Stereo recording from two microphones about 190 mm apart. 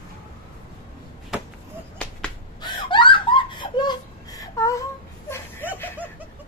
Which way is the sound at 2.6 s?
25° left (ahead or behind).